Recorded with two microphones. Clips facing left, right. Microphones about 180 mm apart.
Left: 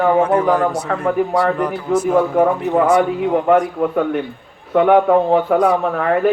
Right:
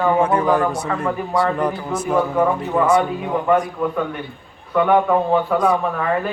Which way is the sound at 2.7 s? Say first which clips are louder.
Left 2 dB; 65° left (ahead or behind).